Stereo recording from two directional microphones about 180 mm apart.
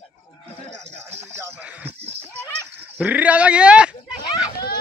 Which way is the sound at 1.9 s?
35° right (ahead or behind).